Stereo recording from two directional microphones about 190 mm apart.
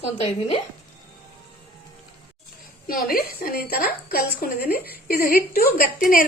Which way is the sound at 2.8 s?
50° left (ahead or behind).